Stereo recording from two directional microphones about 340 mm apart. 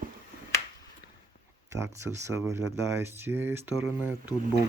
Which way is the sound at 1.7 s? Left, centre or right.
Centre.